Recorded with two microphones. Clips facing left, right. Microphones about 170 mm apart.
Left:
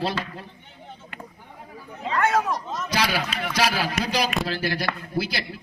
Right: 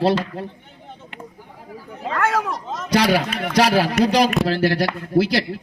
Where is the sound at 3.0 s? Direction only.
60° right (ahead or behind).